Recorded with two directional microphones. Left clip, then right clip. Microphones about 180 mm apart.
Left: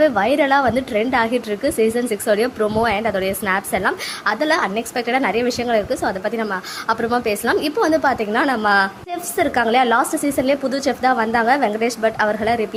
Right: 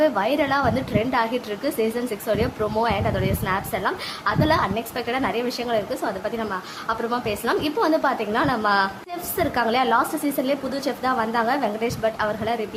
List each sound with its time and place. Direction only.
0.0 s a woman's voice: 20° left (ahead or behind)